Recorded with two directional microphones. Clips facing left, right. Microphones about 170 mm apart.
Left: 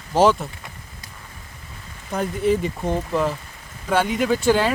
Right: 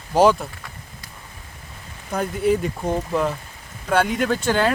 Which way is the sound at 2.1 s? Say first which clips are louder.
Even; centre (ahead or behind).